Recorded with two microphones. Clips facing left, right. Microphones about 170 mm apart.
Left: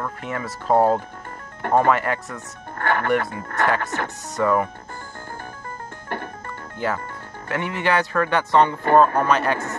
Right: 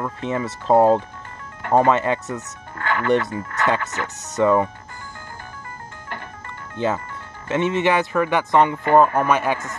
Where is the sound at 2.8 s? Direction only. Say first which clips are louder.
Left 1 dB; 50° left (ahead or behind).